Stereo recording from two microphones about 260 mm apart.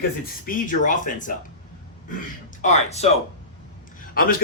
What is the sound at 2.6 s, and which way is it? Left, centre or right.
Speech, left.